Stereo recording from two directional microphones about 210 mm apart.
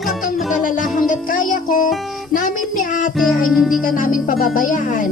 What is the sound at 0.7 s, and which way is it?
Music, 40° left (ahead or behind).